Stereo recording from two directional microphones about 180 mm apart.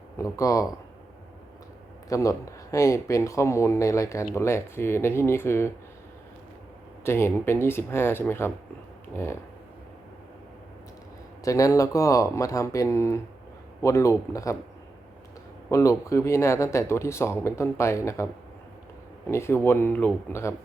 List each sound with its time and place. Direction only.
0.2 s speech: 20° left (ahead or behind)
2.0 s speech: 20° left (ahead or behind)
7.0 s speech: 15° left (ahead or behind)
11.4 s speech: 20° left (ahead or behind)
15.7 s speech: 15° left (ahead or behind)
19.3 s speech: 15° left (ahead or behind)